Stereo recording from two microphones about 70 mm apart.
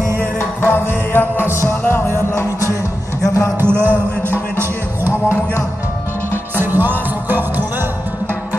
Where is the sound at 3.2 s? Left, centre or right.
Left.